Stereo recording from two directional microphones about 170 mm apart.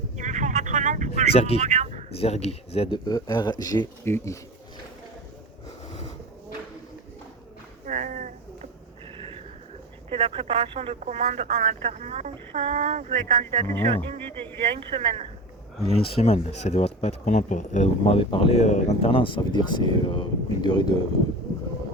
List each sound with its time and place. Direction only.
0.2 s vehicle: 45° right (ahead or behind)
1.3 s speech: 35° left (ahead or behind)
1.6 s a sound: 45° right (ahead or behind)
2.1 s speech: 35° left (ahead or behind)
3.0 s speech: 20° left (ahead or behind)
7.9 s a sound: 50° right (ahead or behind)
9.1 s a sound: 35° right (ahead or behind)
10.1 s speech: 35° right (ahead or behind)
13.7 s speech: 10° left (ahead or behind)
14.8 s speech: 35° right (ahead or behind)
15.9 s speech: 35° left (ahead or behind)